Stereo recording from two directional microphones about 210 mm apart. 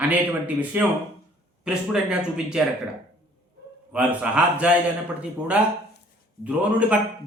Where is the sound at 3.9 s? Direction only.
5° right (ahead or behind).